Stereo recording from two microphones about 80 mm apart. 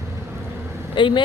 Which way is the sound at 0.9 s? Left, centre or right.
Left.